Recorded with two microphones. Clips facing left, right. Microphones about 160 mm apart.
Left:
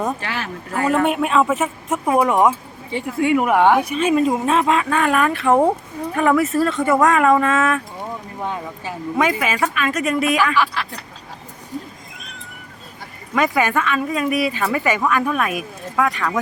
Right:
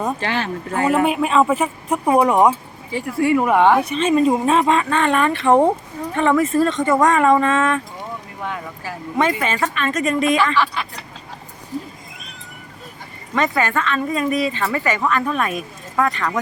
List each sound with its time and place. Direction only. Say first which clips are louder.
0.2 s speech: right 5 dB; 30° right (ahead or behind)
0.9 s a woman's voice: even; 5° right (ahead or behind)
2.9 s a woman's voice: right 1 dB; 20° left (ahead or behind)
8.4 s speech: left 2 dB; 25° left (ahead or behind)
9.1 s speech: even; 5° left (ahead or behind)
13.3 s a woman's voice: left 1 dB; 10° left (ahead or behind)